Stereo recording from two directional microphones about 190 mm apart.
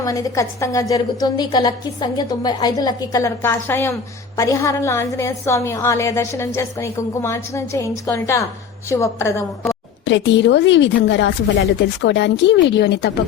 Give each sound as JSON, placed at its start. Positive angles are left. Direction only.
{"t": 0.0, "sound": "a woman's voice", "side_deg": 15}
{"t": 10.1, "sound": "speech", "side_deg": 75}